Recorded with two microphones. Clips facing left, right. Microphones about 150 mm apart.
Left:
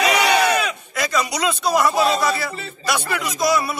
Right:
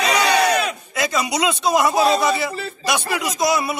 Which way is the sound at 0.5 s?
25° right (ahead or behind).